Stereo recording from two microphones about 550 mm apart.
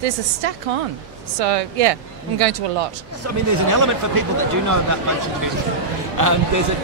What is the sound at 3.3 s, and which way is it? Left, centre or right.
Speech, right.